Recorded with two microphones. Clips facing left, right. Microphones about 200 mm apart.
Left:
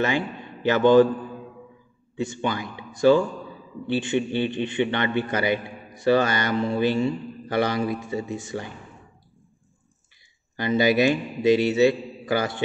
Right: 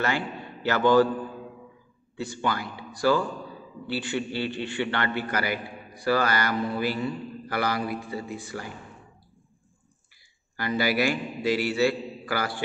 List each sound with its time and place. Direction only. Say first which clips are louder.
0.0 s a man's voice: left 4 dB; 20° left (ahead or behind)
2.1 s a man's voice: left 3 dB; 20° left (ahead or behind)
10.5 s a man's voice: left 6 dB; 20° left (ahead or behind)